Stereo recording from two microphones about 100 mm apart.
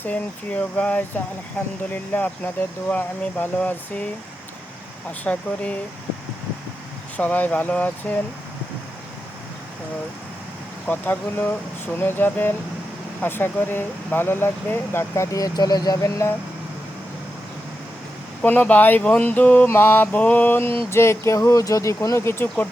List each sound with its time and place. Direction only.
0.0 s mantra: 15° left (ahead or behind)
5.2 s mantra: 15° left (ahead or behind)
7.2 s mantra: 15° left (ahead or behind)
10.8 s speech: 15° left (ahead or behind); by 16.3 s 35° left (ahead or behind)
18.4 s mantra: 20° left (ahead or behind)
20.9 s speech: 25° left (ahead or behind)